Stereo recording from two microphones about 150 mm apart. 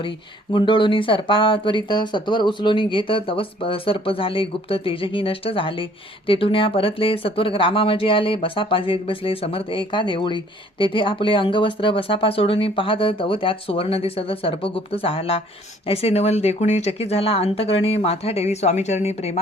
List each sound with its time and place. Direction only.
0.5 s speech: 35° left (ahead or behind)